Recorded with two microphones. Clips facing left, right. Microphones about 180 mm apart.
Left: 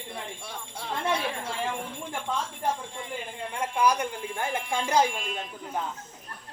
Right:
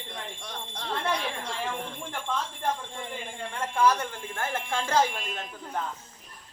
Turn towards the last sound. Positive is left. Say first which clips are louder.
# left 2 dB
turn(degrees=0)  # may be behind; listen again after turning